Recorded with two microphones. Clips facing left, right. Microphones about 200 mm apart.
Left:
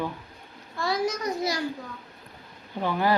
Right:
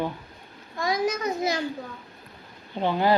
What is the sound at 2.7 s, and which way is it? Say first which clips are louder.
Child singing: right 2 dB; 25° right (ahead or behind).